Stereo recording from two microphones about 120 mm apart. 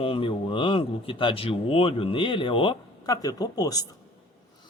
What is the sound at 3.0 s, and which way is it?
Speech, 30° left (ahead or behind).